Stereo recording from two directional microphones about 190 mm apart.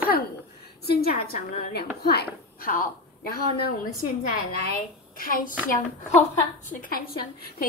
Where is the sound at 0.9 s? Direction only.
55° left (ahead or behind).